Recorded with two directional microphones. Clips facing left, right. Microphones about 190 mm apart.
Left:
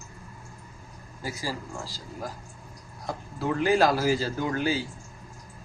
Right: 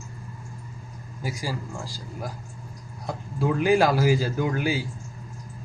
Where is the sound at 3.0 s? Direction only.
15° right (ahead or behind).